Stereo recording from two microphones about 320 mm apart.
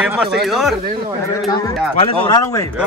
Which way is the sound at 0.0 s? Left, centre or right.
Centre.